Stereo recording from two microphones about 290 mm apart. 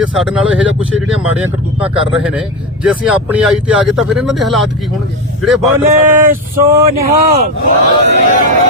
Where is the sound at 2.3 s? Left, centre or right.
Centre.